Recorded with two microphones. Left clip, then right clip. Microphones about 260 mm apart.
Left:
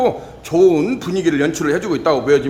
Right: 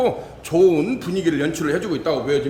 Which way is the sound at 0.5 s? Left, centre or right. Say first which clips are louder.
Left 3 dB; centre.